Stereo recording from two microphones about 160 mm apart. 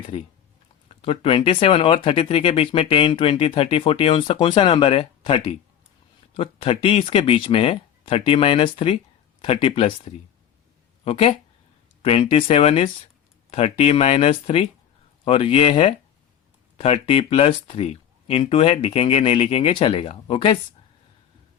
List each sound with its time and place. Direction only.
0.9 s speech: 35° left (ahead or behind)